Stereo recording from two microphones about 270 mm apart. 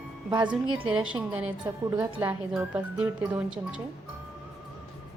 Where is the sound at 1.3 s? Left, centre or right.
Centre.